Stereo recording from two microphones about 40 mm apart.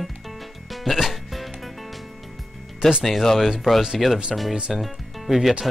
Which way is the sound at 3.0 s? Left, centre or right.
Centre.